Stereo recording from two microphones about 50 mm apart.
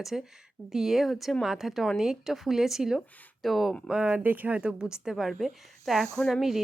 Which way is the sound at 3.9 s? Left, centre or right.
Right.